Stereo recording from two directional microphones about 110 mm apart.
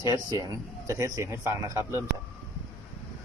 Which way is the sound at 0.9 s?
30° right (ahead or behind).